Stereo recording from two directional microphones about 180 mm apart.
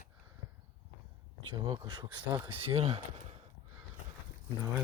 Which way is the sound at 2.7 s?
35° right (ahead or behind).